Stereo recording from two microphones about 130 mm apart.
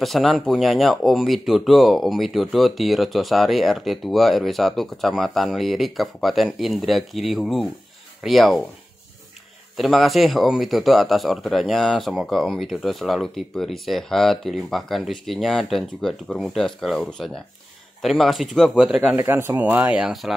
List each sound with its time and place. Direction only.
0.0 s speech: centre (ahead or behind)
9.8 s speech: centre (ahead or behind)
19.1 s speech: 20° right (ahead or behind); by 20.3 s centre (ahead or behind)